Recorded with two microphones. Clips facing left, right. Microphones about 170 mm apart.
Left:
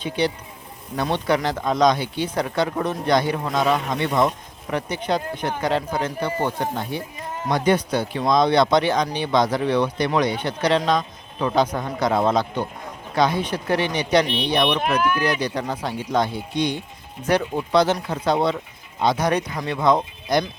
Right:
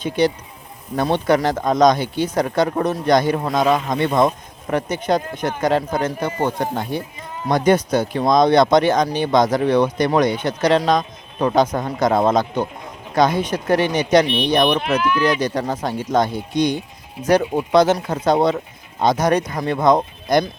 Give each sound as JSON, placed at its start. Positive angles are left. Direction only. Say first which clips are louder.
{"t": 0.2, "sound": "speech", "louder": "right 5 dB", "side_deg": -45}